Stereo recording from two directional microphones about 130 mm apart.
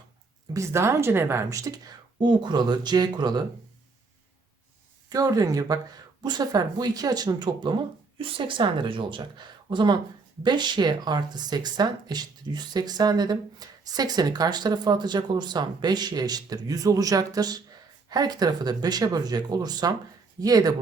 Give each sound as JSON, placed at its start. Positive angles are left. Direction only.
{"t": 0.5, "sound": "speech", "side_deg": -20}
{"t": 2.1, "sound": "speech", "side_deg": -40}
{"t": 5.0, "sound": "speech", "side_deg": -30}